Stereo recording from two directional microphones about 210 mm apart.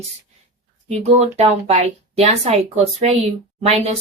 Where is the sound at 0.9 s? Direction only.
30° right (ahead or behind).